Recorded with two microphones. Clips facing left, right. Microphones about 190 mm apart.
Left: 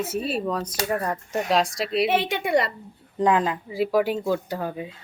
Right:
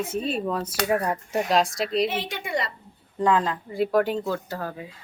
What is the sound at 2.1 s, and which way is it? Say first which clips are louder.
Speech: left 7 dB; 60° left (ahead or behind).